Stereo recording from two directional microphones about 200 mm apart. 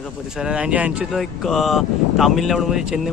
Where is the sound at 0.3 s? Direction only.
5° right (ahead or behind).